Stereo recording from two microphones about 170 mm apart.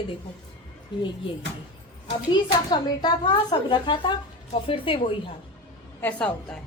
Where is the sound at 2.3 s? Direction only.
25° left (ahead or behind).